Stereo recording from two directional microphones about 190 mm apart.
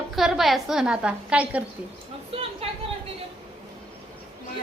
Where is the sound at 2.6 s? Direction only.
30° right (ahead or behind).